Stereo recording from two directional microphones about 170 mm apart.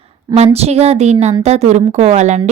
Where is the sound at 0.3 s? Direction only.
40° right (ahead or behind).